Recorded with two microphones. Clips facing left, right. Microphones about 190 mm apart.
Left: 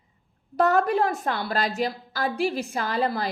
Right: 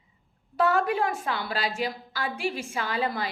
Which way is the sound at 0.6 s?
40° left (ahead or behind).